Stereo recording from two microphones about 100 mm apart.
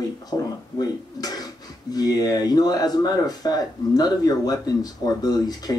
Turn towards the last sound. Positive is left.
turn(degrees=40)  # may be behind; listen again after turning